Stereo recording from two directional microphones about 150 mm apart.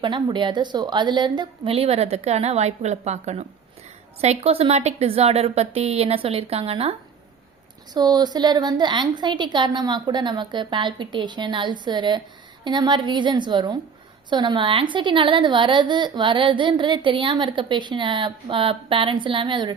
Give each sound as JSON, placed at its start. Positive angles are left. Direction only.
{"t": 0.0, "sound": "a woman's voice", "side_deg": -30}
{"t": 7.9, "sound": "a woman's voice", "side_deg": -25}